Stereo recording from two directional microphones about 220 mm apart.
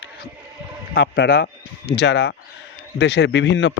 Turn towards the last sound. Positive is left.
turn(degrees=55)  # may be behind; listen again after turning